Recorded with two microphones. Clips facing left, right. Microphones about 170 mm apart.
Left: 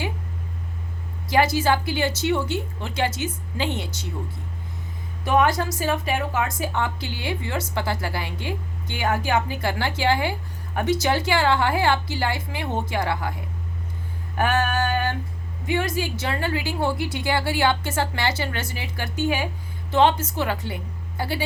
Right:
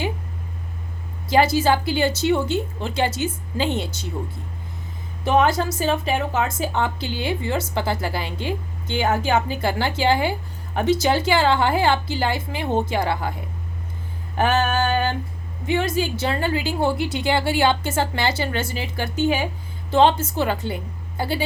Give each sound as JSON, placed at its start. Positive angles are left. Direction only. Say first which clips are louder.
{"t": 1.3, "sound": "a woman's voice", "louder": "right 3 dB", "side_deg": -25}
{"t": 5.2, "sound": "a woman's voice", "louder": "right 2 dB", "side_deg": -25}
{"t": 14.3, "sound": "a woman's voice", "louder": "right 2 dB", "side_deg": -25}